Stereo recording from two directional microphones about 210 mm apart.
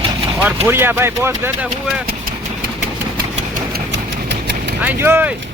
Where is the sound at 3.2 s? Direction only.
45° right (ahead or behind).